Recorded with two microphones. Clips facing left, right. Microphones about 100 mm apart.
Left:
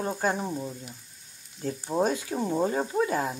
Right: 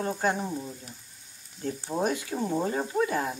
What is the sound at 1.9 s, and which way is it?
Speech, 20° left (ahead or behind).